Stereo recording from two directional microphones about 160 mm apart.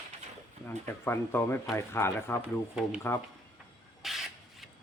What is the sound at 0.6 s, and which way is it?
Speech, 15° left (ahead or behind).